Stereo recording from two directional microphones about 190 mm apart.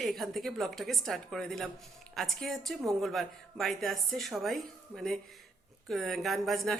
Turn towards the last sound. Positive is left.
turn(degrees=0)  # may be behind; listen again after turning